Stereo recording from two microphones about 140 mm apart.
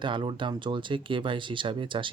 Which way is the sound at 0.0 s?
35° right (ahead or behind).